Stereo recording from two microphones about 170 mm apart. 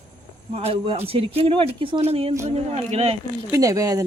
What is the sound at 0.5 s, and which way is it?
Speech, 35° right (ahead or behind).